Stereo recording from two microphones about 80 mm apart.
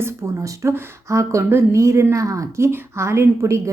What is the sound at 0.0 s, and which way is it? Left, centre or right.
A woman's voice, right.